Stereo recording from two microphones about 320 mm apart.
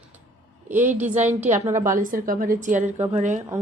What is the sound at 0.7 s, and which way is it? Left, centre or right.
A woman's voice, centre.